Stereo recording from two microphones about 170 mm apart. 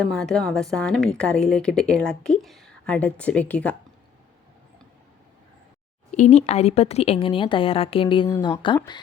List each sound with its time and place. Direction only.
0.0 s a woman's voice: centre (ahead or behind)
6.1 s speech: 45° left (ahead or behind); by 8.8 s 25° left (ahead or behind)